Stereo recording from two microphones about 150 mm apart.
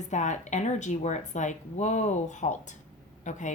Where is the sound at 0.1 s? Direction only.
55° left (ahead or behind).